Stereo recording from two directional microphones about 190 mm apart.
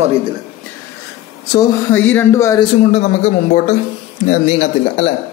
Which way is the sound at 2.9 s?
35° left (ahead or behind).